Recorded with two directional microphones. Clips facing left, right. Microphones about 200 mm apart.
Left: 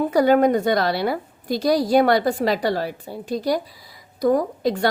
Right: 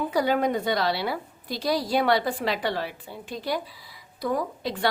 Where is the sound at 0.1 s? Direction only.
50° left (ahead or behind).